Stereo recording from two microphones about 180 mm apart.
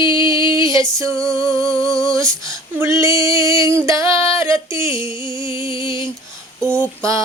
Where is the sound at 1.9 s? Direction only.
5° left (ahead or behind).